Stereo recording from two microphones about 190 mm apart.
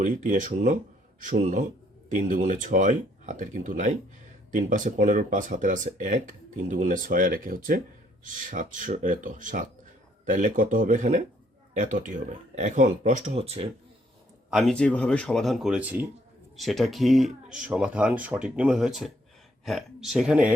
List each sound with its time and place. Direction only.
0.0 s speech: 45° right (ahead or behind)
14.5 s speech: 5° left (ahead or behind)